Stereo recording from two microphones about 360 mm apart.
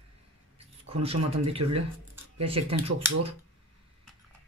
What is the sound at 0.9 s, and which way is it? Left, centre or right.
Speech, centre.